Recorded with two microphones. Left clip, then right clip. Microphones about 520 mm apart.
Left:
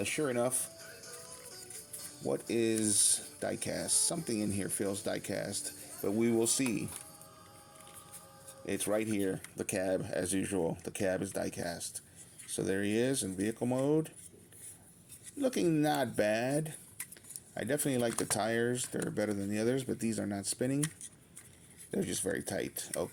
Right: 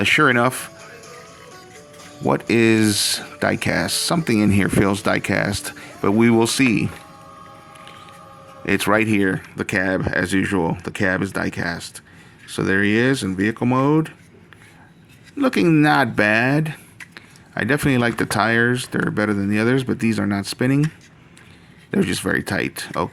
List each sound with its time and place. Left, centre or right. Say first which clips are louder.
0.0 s speech: right 17 dB; centre
2.2 s speech: right 15 dB; centre
6.3 s speech: right 14 dB; centre
8.6 s speech: right 16 dB; centre
15.4 s speech: right 14 dB; left
21.9 s speech: right 14 dB; left